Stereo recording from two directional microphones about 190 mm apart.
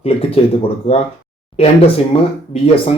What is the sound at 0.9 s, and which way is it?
Speech, 30° left (ahead or behind).